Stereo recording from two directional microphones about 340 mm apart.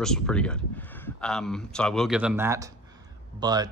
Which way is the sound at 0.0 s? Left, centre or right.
Centre.